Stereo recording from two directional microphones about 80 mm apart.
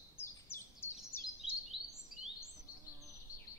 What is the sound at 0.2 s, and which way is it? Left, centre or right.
Bird vocalization, left.